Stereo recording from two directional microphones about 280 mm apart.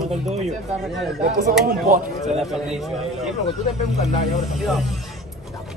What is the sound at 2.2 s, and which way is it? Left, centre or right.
A man's voice, centre.